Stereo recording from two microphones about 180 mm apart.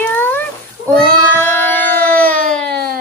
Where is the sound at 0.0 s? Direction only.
10° left (ahead or behind).